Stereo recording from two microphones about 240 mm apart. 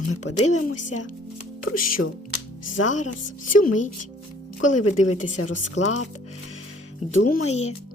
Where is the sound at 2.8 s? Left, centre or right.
Left.